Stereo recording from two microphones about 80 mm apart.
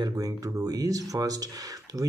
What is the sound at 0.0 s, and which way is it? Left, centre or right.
Speech, right.